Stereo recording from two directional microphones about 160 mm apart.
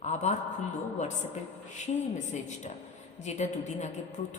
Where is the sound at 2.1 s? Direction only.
45° left (ahead or behind).